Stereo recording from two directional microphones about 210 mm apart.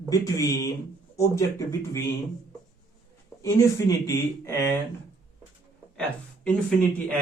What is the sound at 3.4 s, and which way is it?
Speech, 15° left (ahead or behind).